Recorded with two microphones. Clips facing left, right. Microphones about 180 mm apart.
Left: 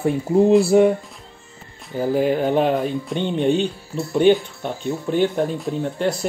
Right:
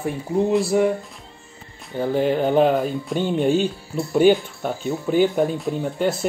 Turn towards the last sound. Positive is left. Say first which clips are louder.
# even
turn(degrees=0)  # may be behind; listen again after turning